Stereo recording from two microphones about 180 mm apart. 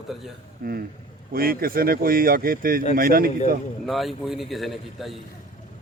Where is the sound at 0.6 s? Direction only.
55° right (ahead or behind).